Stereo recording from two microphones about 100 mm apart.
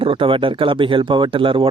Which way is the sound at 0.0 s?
60° right (ahead or behind).